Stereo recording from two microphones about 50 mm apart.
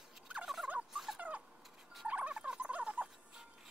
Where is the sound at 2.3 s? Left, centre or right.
Right.